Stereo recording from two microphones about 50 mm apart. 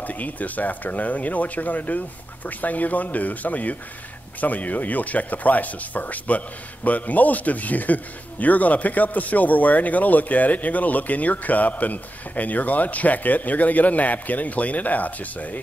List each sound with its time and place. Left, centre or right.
0.0 s speech: left